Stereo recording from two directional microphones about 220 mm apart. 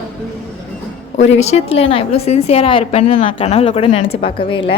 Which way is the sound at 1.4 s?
30° left (ahead or behind).